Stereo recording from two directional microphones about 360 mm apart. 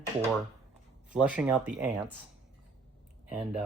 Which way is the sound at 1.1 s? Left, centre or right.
Centre.